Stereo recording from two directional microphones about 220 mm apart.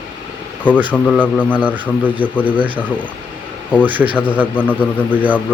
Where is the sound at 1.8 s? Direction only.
5° left (ahead or behind).